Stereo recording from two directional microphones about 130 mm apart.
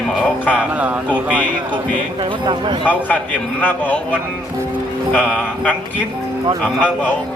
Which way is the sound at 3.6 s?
15° left (ahead or behind).